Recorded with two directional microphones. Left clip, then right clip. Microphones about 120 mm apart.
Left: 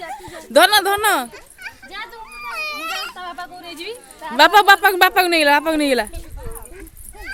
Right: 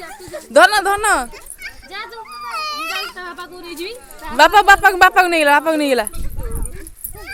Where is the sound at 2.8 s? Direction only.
15° left (ahead or behind).